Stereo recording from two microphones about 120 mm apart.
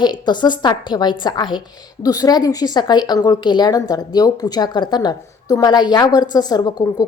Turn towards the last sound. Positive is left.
turn(degrees=35)  # may be behind; listen again after turning